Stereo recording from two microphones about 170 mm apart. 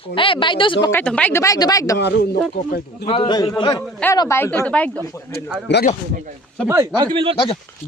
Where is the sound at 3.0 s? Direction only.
30° left (ahead or behind).